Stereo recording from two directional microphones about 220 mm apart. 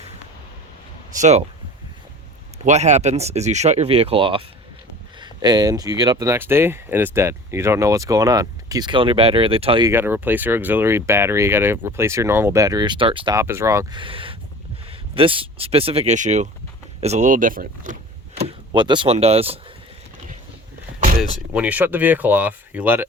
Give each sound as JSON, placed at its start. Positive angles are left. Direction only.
{"t": 1.2, "sound": "speech", "side_deg": -30}
{"t": 2.6, "sound": "speech", "side_deg": -30}
{"t": 9.9, "sound": "speech", "side_deg": -10}
{"t": 18.4, "sound": "speech", "side_deg": -20}
{"t": 21.2, "sound": "speech", "side_deg": -5}